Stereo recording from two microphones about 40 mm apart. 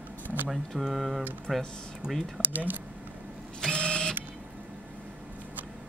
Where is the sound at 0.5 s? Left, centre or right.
Centre.